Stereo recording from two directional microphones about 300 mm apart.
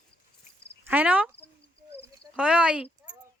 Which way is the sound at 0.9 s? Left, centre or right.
Centre.